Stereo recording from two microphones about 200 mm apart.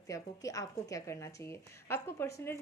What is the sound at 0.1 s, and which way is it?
A woman's voice, 15° left (ahead or behind).